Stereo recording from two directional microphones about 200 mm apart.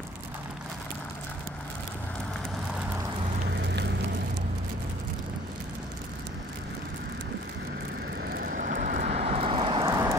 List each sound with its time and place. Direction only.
3.5 s vehicle: 60° right (ahead or behind)
8.3 s vehicle: 45° right (ahead or behind); by 10.1 s 15° right (ahead or behind)